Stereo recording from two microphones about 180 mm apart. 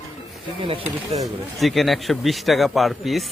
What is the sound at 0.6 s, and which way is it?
Speech, 30° right (ahead or behind).